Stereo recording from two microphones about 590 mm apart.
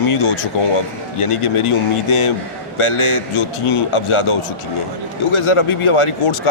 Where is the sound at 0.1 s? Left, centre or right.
Left.